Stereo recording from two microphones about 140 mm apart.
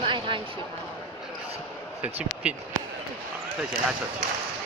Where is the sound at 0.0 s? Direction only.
35° right (ahead or behind).